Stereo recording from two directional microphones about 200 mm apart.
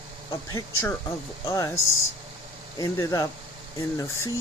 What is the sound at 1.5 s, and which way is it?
Speech, 15° left (ahead or behind).